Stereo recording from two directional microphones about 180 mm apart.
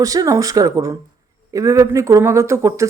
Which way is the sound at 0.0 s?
20° right (ahead or behind).